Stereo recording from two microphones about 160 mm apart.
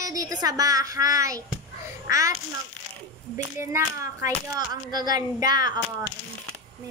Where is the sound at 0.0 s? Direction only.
20° right (ahead or behind).